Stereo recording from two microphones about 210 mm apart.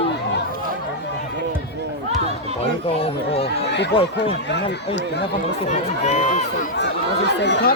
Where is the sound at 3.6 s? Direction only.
55° left (ahead or behind).